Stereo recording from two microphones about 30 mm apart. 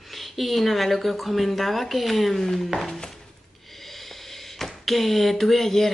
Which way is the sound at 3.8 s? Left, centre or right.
Centre.